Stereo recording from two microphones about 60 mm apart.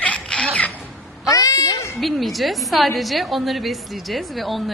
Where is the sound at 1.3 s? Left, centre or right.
Left.